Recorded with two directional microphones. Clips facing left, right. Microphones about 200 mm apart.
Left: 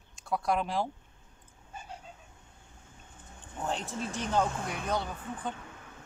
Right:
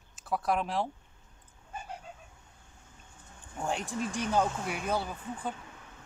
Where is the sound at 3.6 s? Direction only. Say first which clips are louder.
Right 1 dB; 10° right (ahead or behind).